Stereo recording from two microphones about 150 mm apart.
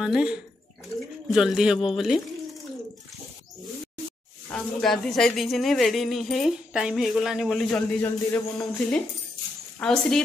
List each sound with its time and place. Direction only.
0.0 s speech: 5° right (ahead or behind)
4.5 s speech: 5° left (ahead or behind)